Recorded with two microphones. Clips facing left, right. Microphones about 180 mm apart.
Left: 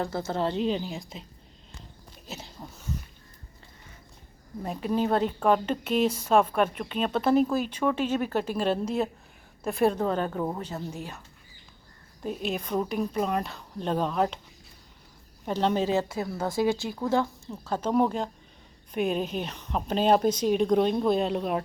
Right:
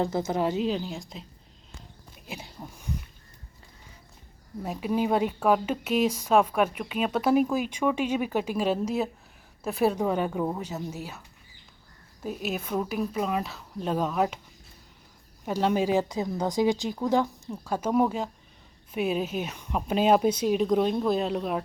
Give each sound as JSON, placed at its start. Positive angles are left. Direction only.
{"t": 0.0, "sound": "a woman's voice", "side_deg": -20}
{"t": 2.2, "sound": "speech", "side_deg": -10}
{"t": 4.6, "sound": "a woman's voice", "side_deg": -5}
{"t": 12.2, "sound": "speech", "side_deg": -5}
{"t": 15.4, "sound": "a woman's voice", "side_deg": -10}